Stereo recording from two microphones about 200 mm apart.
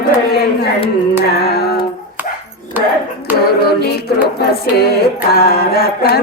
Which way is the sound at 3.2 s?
50° left (ahead or behind).